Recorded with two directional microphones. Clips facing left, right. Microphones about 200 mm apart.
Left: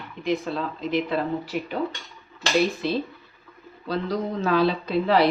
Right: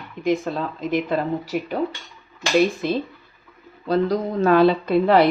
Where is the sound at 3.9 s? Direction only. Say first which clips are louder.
Right 6 dB; 50° right (ahead or behind).